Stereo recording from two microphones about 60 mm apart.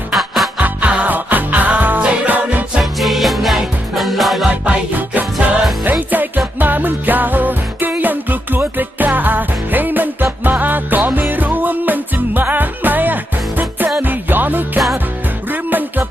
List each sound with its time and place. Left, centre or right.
0.1 s music: centre
0.6 s music: right
3.0 s music: centre
4.6 s music: right